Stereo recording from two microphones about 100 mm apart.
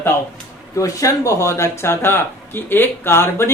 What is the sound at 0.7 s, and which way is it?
Speech, 35° left (ahead or behind).